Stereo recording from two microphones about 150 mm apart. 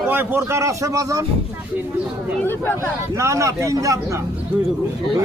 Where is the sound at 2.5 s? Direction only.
15° left (ahead or behind).